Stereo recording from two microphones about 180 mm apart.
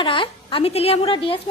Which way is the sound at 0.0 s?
30° left (ahead or behind).